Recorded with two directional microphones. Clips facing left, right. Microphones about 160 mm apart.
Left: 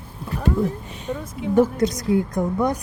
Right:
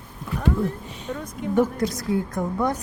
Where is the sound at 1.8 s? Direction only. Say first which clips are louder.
Left 4 dB; 20° left (ahead or behind).